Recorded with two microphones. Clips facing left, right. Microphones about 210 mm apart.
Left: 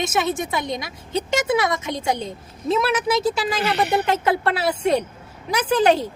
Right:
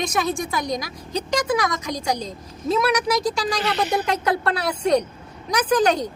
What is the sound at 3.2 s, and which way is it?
Speech, 5° left (ahead or behind).